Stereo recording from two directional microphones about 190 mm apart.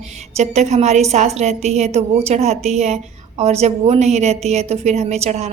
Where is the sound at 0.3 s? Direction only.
35° right (ahead or behind).